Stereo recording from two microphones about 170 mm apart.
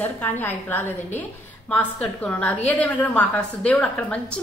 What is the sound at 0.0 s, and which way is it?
A woman's voice, 10° left (ahead or behind).